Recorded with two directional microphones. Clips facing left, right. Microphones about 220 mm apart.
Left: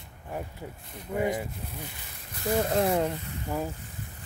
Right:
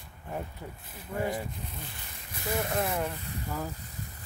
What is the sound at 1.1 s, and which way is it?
Speech, 20° left (ahead or behind).